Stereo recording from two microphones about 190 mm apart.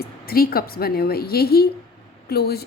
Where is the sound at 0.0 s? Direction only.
50° left (ahead or behind).